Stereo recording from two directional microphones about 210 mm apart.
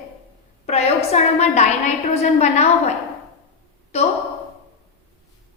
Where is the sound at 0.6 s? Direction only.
30° left (ahead or behind).